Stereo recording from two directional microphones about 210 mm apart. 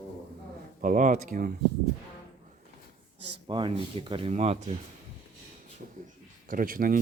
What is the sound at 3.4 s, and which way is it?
Speech, 20° right (ahead or behind).